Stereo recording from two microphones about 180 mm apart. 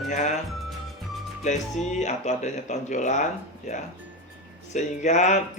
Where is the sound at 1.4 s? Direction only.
40° left (ahead or behind).